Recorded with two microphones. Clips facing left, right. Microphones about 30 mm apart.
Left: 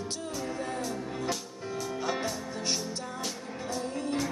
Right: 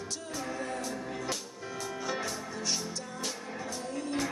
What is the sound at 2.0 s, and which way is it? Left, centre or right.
Music, left.